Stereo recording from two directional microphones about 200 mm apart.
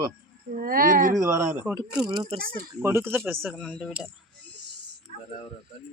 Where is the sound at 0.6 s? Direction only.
45° right (ahead or behind).